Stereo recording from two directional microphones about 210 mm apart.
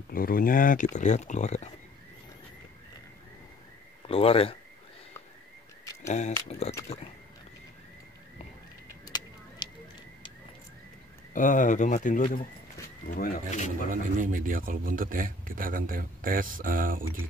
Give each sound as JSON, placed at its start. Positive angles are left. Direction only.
{"t": 0.1, "sound": "speech", "side_deg": 45}
{"t": 4.0, "sound": "speech", "side_deg": 25}
{"t": 6.0, "sound": "speech", "side_deg": 35}
{"t": 9.0, "sound": "bird", "side_deg": 20}
{"t": 11.3, "sound": "speech", "side_deg": 40}
{"t": 12.2, "sound": "speech", "side_deg": 25}
{"t": 13.1, "sound": "speech", "side_deg": 45}
{"t": 14.1, "sound": "speech", "side_deg": -40}